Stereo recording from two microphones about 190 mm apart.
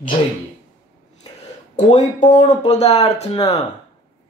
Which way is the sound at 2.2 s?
40° left (ahead or behind).